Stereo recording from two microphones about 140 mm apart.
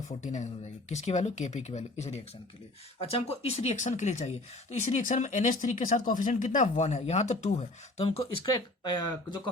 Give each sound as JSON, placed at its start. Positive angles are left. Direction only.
{"t": 0.1, "sound": "speech", "side_deg": 60}